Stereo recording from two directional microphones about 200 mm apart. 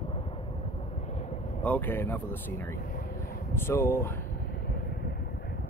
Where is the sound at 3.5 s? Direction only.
15° left (ahead or behind).